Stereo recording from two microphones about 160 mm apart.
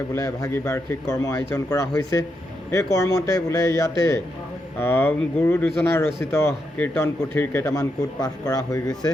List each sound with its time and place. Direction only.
0.1 s a man's voice: 20° left (ahead or behind)